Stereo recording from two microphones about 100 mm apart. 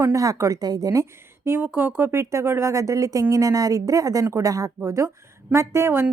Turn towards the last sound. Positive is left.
turn(degrees=-25)  # may be behind; listen again after turning